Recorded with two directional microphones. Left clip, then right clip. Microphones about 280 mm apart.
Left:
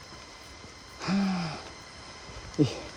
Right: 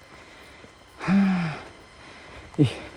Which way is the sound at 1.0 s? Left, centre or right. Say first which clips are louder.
Right 6 dB; right.